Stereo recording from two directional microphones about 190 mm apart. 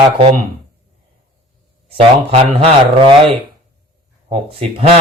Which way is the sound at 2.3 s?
30° right (ahead or behind).